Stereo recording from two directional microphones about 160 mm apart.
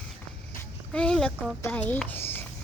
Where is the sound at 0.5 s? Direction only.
5° left (ahead or behind).